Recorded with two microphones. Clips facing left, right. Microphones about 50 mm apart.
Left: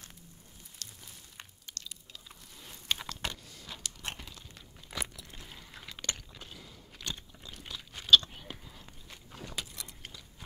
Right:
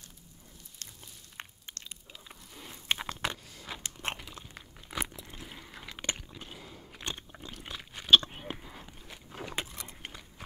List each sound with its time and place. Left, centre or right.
0.8 s a sound: right
1.3 s biting: right
4.3 s chewing: right; by 5.9 s centre
5.9 s a sound: right
7.6 s biting: right
9.6 s keys jangling: right